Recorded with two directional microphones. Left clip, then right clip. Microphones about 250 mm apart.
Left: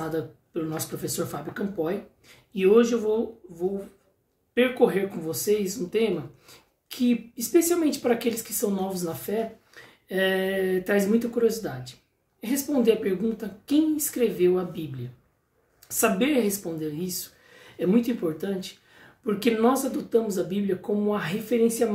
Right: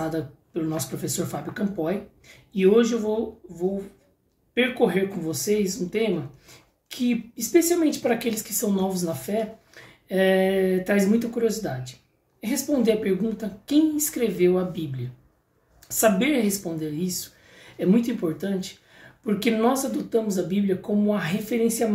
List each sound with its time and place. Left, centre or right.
0.0 s speech: centre
4.6 s speech: centre
15.9 s speech: centre